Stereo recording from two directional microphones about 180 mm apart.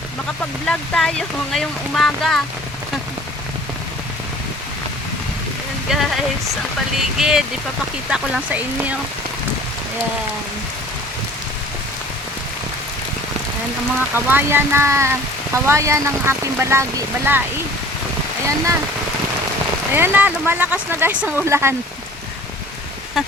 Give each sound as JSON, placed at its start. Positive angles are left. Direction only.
{"t": 0.7, "sound": "speech", "side_deg": 5}
{"t": 5.9, "sound": "speech", "side_deg": -5}
{"t": 7.2, "sound": "speech", "side_deg": -5}
{"t": 14.2, "sound": "speech", "side_deg": -10}
{"t": 18.4, "sound": "speech", "side_deg": -15}
{"t": 19.9, "sound": "speech", "side_deg": -10}